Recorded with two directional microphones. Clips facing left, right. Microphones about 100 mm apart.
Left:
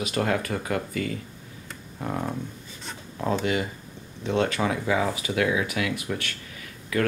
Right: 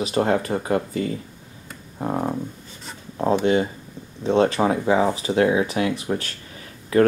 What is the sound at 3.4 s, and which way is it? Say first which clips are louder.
Speech: right 7 dB; 30° right (ahead or behind).